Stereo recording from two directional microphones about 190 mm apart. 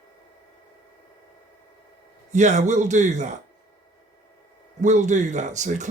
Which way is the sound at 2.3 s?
40° right (ahead or behind).